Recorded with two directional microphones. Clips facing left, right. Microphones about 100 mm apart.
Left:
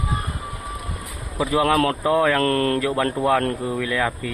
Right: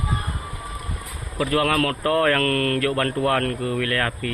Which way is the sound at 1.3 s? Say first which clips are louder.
Left 2 dB; 15° left (ahead or behind).